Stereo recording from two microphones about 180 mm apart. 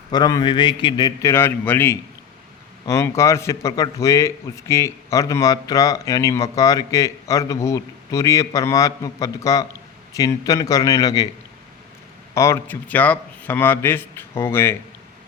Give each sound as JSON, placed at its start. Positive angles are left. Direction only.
{"t": 0.1, "sound": "a man's voice", "side_deg": 20}
{"t": 12.3, "sound": "a man's voice", "side_deg": 15}